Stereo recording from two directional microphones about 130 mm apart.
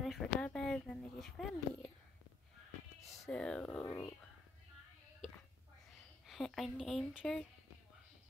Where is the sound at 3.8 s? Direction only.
25° left (ahead or behind).